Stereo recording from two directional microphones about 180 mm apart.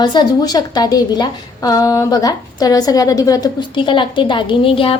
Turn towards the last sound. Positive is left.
turn(degrees=30)  # may be behind; listen again after turning